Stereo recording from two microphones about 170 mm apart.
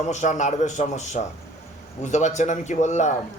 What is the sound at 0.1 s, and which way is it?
A man's voice, 45° left (ahead or behind).